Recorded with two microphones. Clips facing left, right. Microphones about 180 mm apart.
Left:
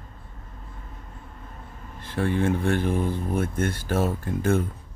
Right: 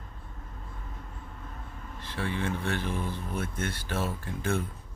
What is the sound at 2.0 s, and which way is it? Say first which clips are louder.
Speech: left 8 dB; 50° left (ahead or behind).